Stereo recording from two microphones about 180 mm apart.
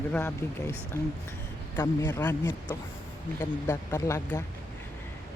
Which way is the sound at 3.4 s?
15° left (ahead or behind).